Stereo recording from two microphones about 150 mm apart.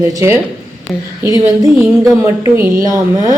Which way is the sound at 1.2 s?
25° right (ahead or behind).